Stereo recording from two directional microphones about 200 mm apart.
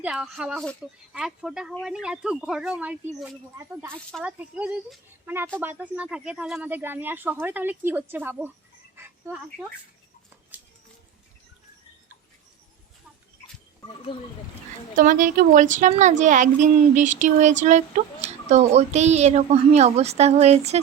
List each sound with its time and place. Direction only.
0.0 s speech: 5° right (ahead or behind)
10.5 s a sound: 10° right (ahead or behind)
14.9 s speech: 40° right (ahead or behind)